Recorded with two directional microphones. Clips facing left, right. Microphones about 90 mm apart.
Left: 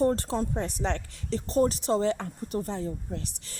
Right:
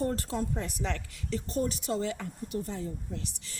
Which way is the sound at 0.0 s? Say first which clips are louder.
Left 6 dB; 35° left (ahead or behind).